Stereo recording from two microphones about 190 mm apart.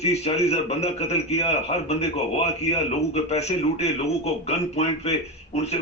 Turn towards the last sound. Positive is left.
turn(degrees=35)  # may be behind; listen again after turning